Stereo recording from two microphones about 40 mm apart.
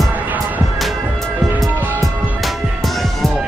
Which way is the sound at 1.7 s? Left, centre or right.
Right.